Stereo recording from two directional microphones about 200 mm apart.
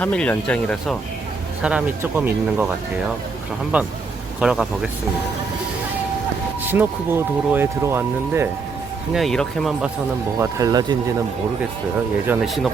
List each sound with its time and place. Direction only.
0.0 s speech: 5° left (ahead or behind)
1.6 s speech: 10° right (ahead or behind)
3.7 s speech: 5° right (ahead or behind)
6.7 s speech: 10° right (ahead or behind)
9.1 s speech: centre (ahead or behind)
10.3 s speech: 15° right (ahead or behind)
12.2 s speech: 5° right (ahead or behind)